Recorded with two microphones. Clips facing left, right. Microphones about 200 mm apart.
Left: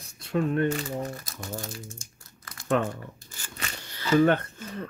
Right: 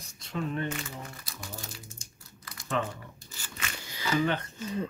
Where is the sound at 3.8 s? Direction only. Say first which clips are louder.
Even; 10° right (ahead or behind).